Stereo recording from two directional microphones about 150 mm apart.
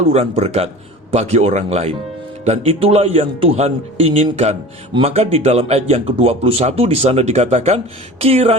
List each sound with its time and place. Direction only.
0.1 s speech: 45° right (ahead or behind)